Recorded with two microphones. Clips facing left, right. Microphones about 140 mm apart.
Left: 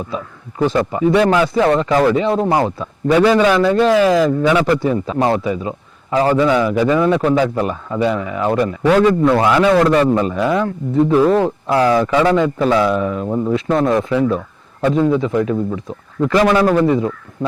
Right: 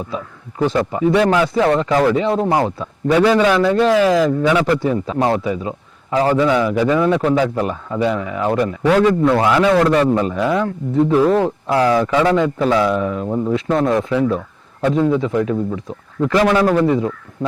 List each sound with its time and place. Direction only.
0.8 s speech: 25° left (ahead or behind)